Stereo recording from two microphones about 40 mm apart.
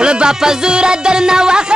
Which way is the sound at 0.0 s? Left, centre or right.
Right.